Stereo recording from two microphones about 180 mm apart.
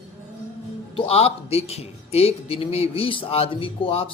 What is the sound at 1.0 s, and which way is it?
A man's voice, 35° left (ahead or behind).